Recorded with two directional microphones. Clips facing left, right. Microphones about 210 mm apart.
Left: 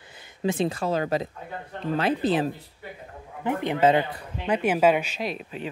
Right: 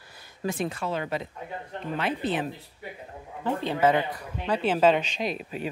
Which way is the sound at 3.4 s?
15° left (ahead or behind).